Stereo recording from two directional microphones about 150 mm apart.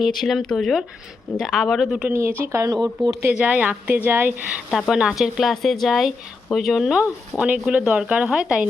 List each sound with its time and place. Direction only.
0.0 s speech: centre (ahead or behind)